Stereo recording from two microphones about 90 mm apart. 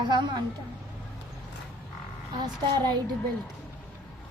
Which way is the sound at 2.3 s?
50° right (ahead or behind).